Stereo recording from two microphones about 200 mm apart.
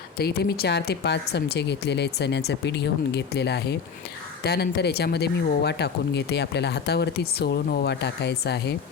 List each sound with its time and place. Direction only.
0.2 s speech: 55° left (ahead or behind)